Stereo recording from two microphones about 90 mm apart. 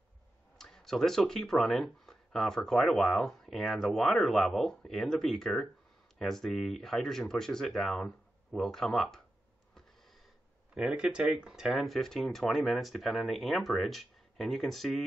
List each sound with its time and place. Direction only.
0.6 s speech: 5° left (ahead or behind)
10.7 s speech: 10° right (ahead or behind)